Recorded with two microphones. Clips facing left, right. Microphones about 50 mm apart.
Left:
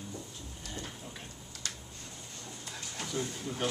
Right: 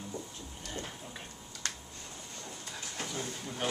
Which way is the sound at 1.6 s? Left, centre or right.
Right.